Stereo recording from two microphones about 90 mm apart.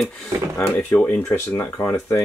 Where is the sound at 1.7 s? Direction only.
20° left (ahead or behind).